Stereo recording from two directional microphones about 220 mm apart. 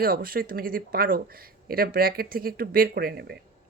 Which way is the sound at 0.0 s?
40° right (ahead or behind).